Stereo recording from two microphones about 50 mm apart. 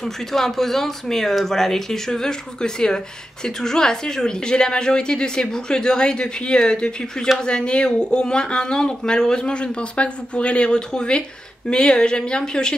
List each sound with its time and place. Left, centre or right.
0.0 s a woman's voice: centre